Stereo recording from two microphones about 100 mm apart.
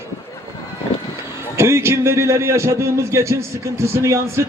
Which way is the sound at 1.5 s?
25° right (ahead or behind).